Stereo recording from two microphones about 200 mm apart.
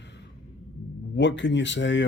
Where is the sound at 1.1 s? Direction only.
65° left (ahead or behind).